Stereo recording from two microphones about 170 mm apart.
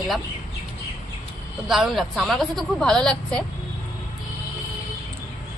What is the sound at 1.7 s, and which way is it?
A woman's voice, centre (ahead or behind).